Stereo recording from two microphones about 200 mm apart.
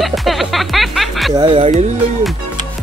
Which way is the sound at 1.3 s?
25° right (ahead or behind).